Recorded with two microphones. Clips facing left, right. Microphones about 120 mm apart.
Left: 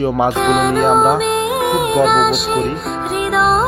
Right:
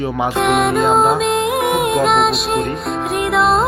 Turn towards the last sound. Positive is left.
turn(degrees=0)  # may be behind; listen again after turning